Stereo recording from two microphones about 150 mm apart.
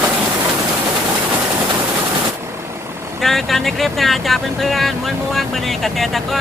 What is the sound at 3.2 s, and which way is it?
Speech, centre (ahead or behind).